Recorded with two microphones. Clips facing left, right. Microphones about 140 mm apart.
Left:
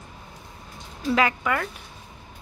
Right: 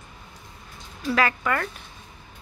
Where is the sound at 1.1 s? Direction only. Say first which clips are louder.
Left 1 dB; 20° left (ahead or behind).